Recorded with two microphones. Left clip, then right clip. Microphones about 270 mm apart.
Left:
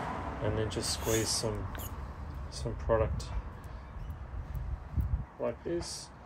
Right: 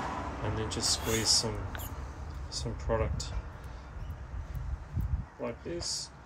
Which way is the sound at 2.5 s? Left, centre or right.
Centre.